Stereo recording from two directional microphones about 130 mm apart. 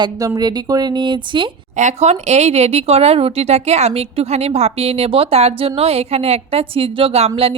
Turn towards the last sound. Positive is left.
turn(degrees=-45)  # may be behind; listen again after turning